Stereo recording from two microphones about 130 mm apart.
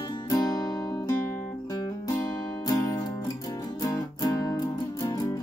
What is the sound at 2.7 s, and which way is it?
Music, 30° left (ahead or behind).